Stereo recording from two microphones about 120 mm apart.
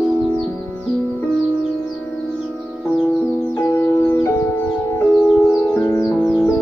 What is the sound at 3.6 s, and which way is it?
Music, 20° left (ahead or behind).